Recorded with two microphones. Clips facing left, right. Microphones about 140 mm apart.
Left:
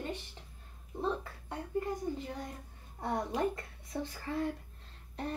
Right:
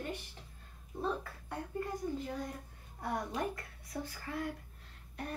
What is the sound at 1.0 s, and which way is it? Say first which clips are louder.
A child's voice: left 2 dB; 20° left (ahead or behind).